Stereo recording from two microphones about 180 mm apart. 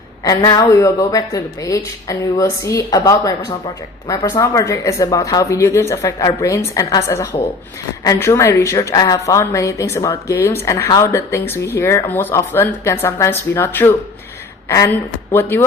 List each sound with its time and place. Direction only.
0.3 s a woman's voice: 20° left (ahead or behind)
15.3 s a woman's voice: 10° left (ahead or behind)